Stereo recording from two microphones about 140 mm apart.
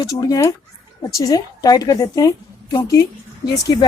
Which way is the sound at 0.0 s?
25° left (ahead or behind).